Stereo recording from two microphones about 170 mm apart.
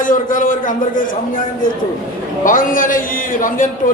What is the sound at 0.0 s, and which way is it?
A man's voice, 50° left (ahead or behind).